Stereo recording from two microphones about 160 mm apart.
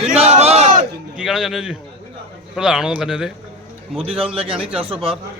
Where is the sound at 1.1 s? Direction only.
Centre (ahead or behind).